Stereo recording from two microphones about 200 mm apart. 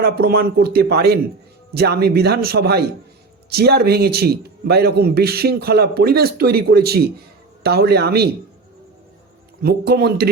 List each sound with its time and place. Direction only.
0.0 s a man's voice: 50° right (ahead or behind)
9.6 s a man's voice: 50° right (ahead or behind)